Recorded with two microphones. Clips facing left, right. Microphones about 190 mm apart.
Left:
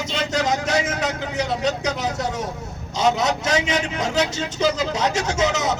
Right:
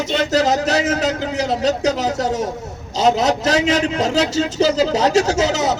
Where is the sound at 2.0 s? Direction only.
35° right (ahead or behind).